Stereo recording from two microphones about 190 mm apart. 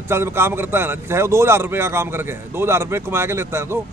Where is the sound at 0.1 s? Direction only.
15° right (ahead or behind).